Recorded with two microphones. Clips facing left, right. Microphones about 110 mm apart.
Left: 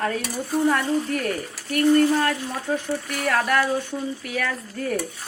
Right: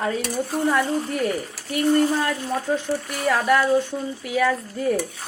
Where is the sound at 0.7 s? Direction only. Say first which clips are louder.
Even; 15° right (ahead or behind).